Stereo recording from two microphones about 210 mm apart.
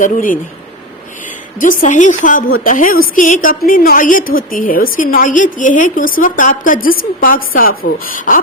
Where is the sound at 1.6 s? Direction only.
40° left (ahead or behind).